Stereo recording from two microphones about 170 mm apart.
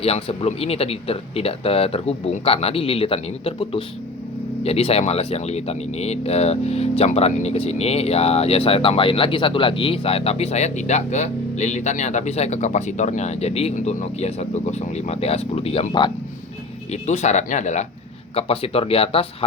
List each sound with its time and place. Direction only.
0.0 s speech: 35° left (ahead or behind)
16.9 s speech: 45° left (ahead or behind)
18.3 s speech: 35° left (ahead or behind)